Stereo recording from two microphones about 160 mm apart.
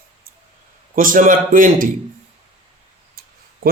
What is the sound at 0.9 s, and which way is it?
Speech, 60° right (ahead or behind).